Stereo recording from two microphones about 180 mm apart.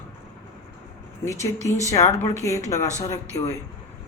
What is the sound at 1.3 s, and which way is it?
A woman's voice, 15° left (ahead or behind).